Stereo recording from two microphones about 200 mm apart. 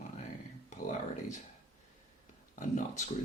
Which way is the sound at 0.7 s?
40° left (ahead or behind).